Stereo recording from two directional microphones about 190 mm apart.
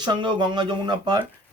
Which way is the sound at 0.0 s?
20° right (ahead or behind).